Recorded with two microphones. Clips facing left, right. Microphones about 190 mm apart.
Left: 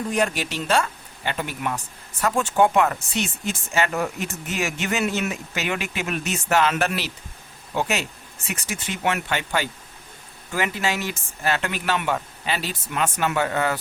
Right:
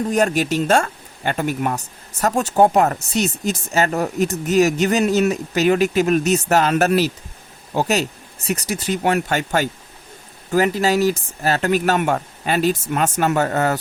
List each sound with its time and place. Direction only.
0.1 s speech: 45° right (ahead or behind)